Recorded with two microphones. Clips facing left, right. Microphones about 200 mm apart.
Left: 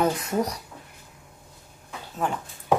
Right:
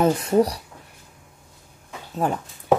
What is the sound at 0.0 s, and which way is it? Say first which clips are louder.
Speech: right 6 dB; 30° right (ahead or behind).